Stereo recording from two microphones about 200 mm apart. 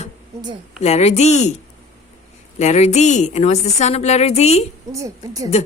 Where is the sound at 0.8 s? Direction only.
30° left (ahead or behind).